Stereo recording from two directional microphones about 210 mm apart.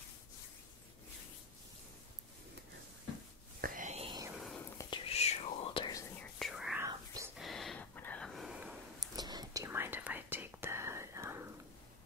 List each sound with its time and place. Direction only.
3.6 s whispering: 35° right (ahead or behind)
4.4 s whispering: 5° left (ahead or behind)
4.8 s whispering: 25° left (ahead or behind)
6.4 s whispering: centre (ahead or behind)
7.3 s a sound: centre (ahead or behind)
9.0 s whispering: 20° right (ahead or behind)